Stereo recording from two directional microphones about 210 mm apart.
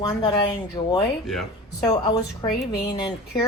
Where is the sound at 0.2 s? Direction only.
20° left (ahead or behind).